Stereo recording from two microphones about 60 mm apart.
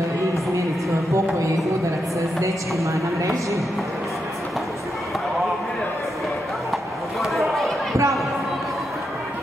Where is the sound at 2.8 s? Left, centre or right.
Right.